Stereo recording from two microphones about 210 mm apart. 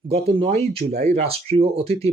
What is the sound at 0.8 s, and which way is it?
Speech, 30° right (ahead or behind).